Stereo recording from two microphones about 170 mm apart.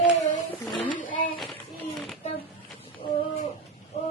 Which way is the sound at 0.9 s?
55° left (ahead or behind).